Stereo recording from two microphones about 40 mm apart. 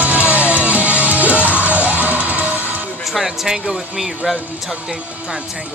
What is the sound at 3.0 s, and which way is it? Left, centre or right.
Speech, centre.